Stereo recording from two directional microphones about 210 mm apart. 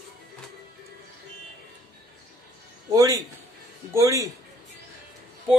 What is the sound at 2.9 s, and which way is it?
A woman's voice, 15° right (ahead or behind).